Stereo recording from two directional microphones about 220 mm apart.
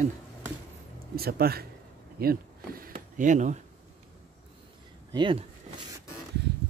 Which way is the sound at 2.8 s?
35° right (ahead or behind).